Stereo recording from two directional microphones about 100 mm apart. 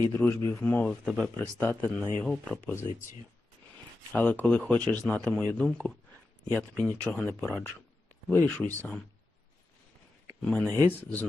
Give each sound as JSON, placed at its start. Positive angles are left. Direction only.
{"t": 0.1, "sound": "speech", "side_deg": 20}
{"t": 4.1, "sound": "speech", "side_deg": 15}
{"t": 10.4, "sound": "speech", "side_deg": 15}